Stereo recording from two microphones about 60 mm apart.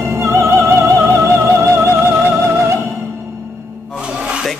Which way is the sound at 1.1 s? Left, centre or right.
Right.